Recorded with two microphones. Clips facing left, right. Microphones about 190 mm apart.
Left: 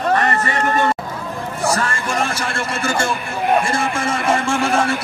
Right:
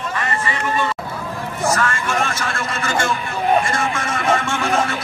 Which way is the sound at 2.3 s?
30° left (ahead or behind).